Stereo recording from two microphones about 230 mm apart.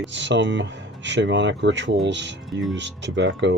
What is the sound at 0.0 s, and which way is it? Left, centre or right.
Speech, right.